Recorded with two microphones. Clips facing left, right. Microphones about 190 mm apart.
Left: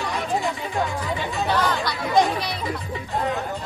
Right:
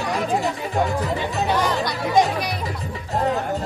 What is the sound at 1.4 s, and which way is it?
Music, 15° right (ahead or behind).